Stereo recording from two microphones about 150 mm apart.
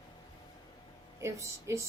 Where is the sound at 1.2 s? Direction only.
20° right (ahead or behind).